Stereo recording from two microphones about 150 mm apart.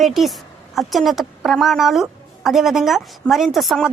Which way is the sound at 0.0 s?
Centre (ahead or behind).